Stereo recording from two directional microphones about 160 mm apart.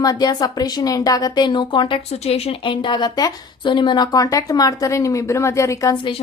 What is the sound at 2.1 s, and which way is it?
A woman's voice, 40° left (ahead or behind).